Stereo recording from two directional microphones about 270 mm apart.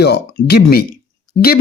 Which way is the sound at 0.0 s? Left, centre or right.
Left.